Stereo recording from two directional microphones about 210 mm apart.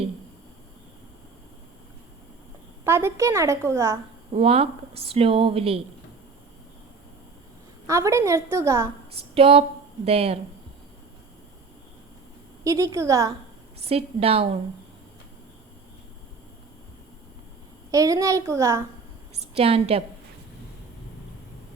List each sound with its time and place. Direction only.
2.8 s a woman's voice: 10° right (ahead or behind)
4.4 s a woman's voice: 25° right (ahead or behind)
7.9 s a woman's voice: 15° right (ahead or behind)
9.3 s a woman's voice: 25° right (ahead or behind)
12.6 s a woman's voice: 15° right (ahead or behind)
13.8 s a woman's voice: 30° right (ahead or behind)
17.9 s a woman's voice: 15° right (ahead or behind)
19.5 s a woman's voice: 30° right (ahead or behind)